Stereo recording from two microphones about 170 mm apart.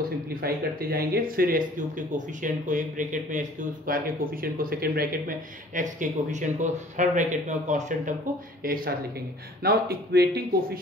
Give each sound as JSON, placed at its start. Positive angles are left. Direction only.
{"t": 0.3, "sound": "speech", "side_deg": -60}
{"t": 5.8, "sound": "a man's voice", "side_deg": -45}
{"t": 8.6, "sound": "a man's voice", "side_deg": -60}